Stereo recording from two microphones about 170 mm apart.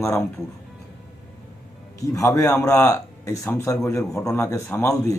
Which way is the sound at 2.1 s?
20° left (ahead or behind).